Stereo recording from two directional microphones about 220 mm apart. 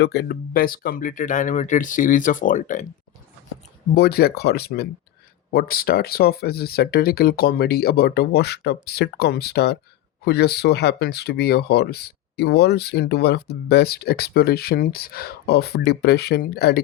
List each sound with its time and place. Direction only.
0.0 s speech: 50° left (ahead or behind)
3.9 s speech: 45° left (ahead or behind)